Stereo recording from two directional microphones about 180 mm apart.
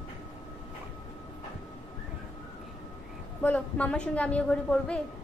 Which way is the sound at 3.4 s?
10° left (ahead or behind).